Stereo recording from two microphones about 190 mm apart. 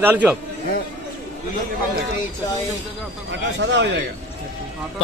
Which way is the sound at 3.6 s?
70° right (ahead or behind).